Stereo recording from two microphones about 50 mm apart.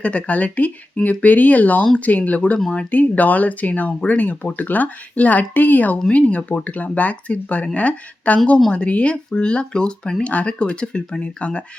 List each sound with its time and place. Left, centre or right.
0.0 s speech: left
6.1 s speech: left